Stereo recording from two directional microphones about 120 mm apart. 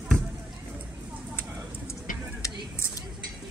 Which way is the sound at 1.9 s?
25° left (ahead or behind).